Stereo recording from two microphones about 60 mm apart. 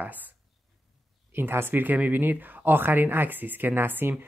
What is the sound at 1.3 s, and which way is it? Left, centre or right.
Speech, right.